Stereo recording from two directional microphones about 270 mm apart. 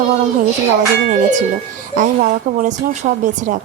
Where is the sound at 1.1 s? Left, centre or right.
Right.